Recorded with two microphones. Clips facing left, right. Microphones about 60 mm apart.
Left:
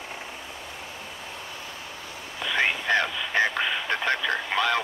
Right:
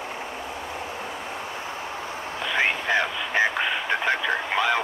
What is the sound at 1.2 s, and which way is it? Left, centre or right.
Vehicle, right.